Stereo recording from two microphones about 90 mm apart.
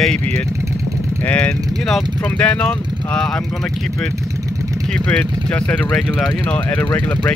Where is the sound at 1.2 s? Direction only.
15° left (ahead or behind).